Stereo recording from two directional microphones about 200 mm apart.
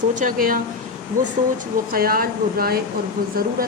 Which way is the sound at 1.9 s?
45° right (ahead or behind).